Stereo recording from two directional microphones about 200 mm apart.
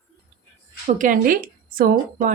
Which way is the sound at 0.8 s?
40° right (ahead or behind).